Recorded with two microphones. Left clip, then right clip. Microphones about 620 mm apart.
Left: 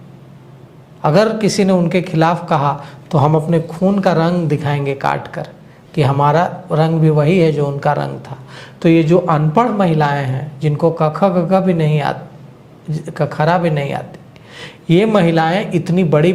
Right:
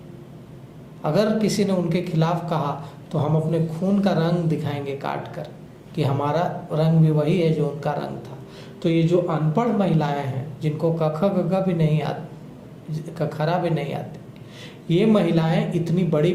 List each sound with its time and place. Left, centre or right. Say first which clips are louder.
1.0 s a man's voice: left 8 dB; left